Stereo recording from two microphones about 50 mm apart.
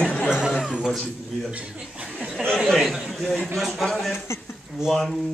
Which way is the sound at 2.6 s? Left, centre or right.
Centre.